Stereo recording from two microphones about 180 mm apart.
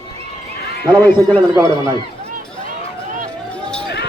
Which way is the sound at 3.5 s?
5° left (ahead or behind).